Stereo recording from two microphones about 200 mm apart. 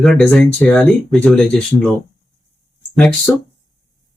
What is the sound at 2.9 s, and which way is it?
Speech, 5° left (ahead or behind).